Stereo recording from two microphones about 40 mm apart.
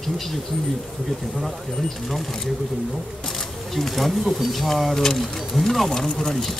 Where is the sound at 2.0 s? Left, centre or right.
Centre.